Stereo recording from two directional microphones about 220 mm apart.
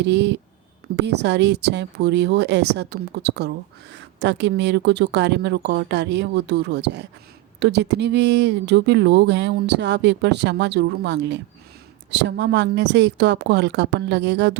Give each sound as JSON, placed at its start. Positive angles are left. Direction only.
{"t": 0.0, "sound": "speech", "side_deg": -50}